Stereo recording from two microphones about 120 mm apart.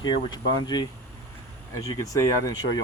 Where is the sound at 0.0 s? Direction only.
35° left (ahead or behind).